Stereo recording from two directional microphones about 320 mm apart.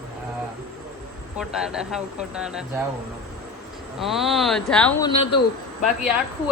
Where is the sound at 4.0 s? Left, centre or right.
Centre.